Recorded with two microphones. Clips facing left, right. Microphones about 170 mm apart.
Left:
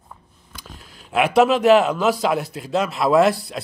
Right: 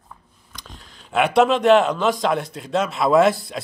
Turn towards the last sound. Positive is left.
turn(degrees=0)  # may be behind; listen again after turning